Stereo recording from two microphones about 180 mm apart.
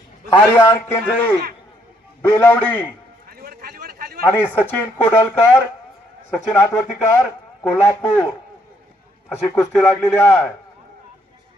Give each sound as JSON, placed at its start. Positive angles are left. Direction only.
{"t": 0.5, "sound": "speech", "side_deg": 10}
{"t": 3.2, "sound": "a sound", "side_deg": -55}
{"t": 4.3, "sound": "speech", "side_deg": 10}
{"t": 9.4, "sound": "speech", "side_deg": 15}